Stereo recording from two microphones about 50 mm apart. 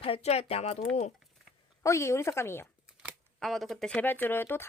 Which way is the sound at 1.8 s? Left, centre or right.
Left.